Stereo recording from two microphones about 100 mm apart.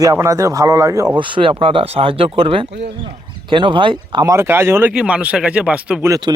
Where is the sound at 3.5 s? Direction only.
55° right (ahead or behind).